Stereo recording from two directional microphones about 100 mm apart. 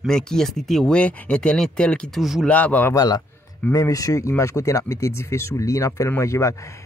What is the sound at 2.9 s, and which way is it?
Speech, 40° left (ahead or behind).